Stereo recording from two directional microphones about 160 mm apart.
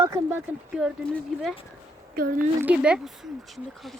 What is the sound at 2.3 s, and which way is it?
Speech, 10° right (ahead or behind).